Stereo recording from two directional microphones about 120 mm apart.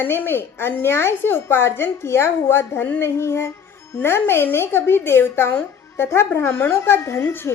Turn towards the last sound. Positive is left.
turn(degrees=20)  # may be behind; listen again after turning